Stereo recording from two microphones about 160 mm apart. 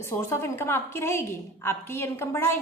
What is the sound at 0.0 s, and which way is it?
A woman's voice, 15° left (ahead or behind).